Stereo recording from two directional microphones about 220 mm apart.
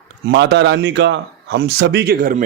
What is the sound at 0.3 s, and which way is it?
A man's voice, 50° right (ahead or behind).